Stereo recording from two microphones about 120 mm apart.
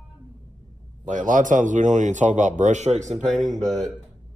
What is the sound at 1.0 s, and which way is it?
A man's voice, 90° right.